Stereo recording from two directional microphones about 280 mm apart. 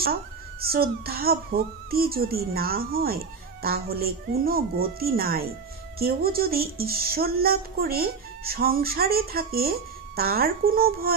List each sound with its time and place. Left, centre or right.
0.6 s speech: right